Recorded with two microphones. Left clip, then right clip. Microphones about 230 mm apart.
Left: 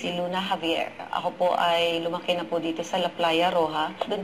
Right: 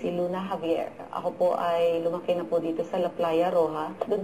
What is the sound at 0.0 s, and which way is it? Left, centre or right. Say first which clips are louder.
Speech: left 1 dB; centre.